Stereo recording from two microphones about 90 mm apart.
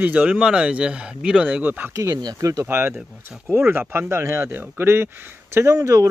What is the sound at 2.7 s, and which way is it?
Speech, 25° right (ahead or behind).